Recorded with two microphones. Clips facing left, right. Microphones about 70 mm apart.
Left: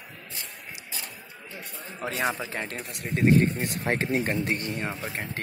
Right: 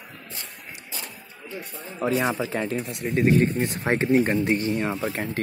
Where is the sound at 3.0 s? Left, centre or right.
Centre.